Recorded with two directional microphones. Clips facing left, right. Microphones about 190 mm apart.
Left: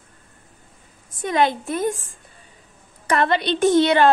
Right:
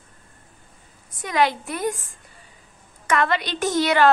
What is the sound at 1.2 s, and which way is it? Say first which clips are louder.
Speech: left 2 dB; 25° left (ahead or behind).